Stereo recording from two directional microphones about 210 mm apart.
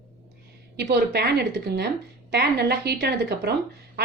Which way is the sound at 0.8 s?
55° right (ahead or behind).